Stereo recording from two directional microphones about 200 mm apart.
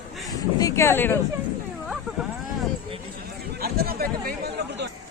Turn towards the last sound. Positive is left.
turn(degrees=-50)  # may be behind; listen again after turning